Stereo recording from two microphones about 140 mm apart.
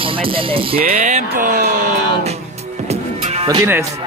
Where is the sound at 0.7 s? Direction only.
80° right.